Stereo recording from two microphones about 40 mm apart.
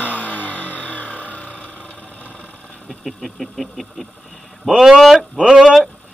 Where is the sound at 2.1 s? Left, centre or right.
Left.